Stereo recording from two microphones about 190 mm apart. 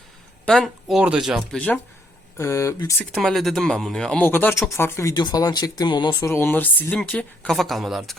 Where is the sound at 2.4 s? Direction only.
15° left (ahead or behind).